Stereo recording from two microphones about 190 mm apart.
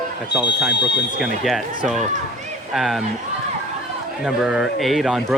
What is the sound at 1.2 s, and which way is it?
Speech, centre (ahead or behind).